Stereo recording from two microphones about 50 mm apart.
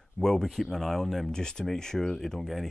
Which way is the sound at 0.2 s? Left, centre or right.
Centre.